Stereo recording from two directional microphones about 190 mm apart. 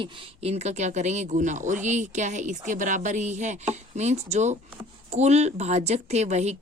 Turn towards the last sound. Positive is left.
turn(degrees=-35)  # may be behind; listen again after turning